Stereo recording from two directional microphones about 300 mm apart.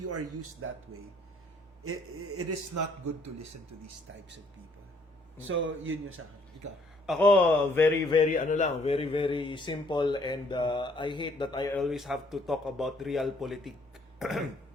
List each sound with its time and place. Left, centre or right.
0.0 s speech: right
1.8 s speech: right
2.7 s a man's voice: right
5.4 s a man's voice: right
6.6 s a man's voice: right
7.1 s a man's voice: centre
8.3 s speech: left
11.8 s a man's voice: centre
14.2 s throat clearing: centre